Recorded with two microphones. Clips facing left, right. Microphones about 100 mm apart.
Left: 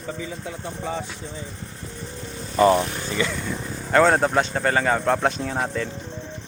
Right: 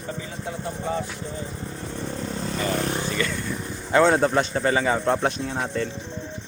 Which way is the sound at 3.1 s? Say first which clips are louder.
Left 1 dB; 20° left (ahead or behind).